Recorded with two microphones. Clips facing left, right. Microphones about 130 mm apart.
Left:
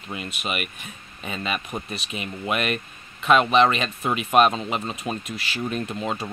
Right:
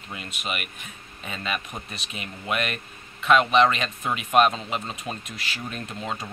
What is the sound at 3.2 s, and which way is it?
Speech, 30° left (ahead or behind).